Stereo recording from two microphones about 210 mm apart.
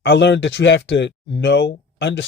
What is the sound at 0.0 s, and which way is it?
Speech, 55° left (ahead or behind).